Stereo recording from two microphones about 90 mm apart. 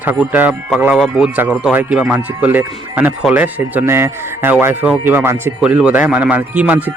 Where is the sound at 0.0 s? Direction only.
20° right (ahead or behind).